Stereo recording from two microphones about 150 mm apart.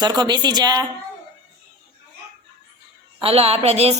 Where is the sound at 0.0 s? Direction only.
30° right (ahead or behind).